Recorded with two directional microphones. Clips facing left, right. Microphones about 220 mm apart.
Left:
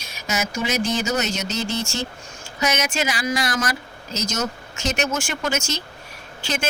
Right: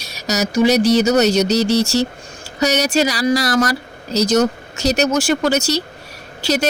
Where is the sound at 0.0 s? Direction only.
40° right (ahead or behind).